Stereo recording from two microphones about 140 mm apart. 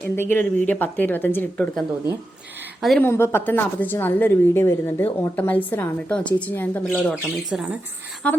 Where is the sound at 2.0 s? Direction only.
15° right (ahead or behind).